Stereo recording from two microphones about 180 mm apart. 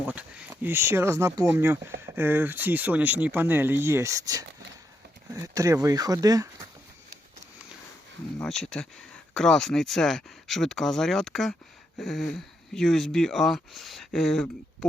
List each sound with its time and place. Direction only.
0.1 s a sound: 10° right (ahead or behind)
0.5 s speech: 15° right (ahead or behind)
8.4 s speech: 5° left (ahead or behind)